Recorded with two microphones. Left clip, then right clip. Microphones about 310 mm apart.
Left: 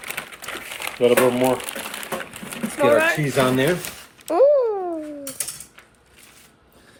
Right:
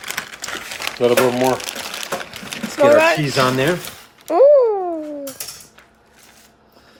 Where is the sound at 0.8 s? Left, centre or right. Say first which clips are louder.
Right 2 dB; right.